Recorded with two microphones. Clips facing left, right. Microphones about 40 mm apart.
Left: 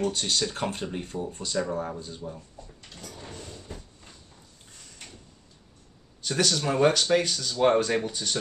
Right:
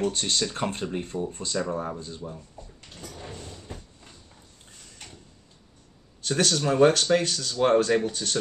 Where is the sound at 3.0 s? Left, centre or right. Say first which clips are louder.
Right 2 dB; centre.